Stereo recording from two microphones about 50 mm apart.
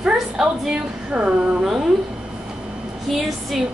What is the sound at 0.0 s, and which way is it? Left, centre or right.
Speech, centre.